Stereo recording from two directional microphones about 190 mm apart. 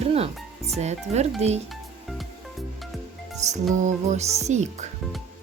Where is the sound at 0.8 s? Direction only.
35° right (ahead or behind).